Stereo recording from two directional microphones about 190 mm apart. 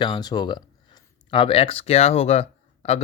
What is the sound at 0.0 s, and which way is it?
Speech, 20° left (ahead or behind).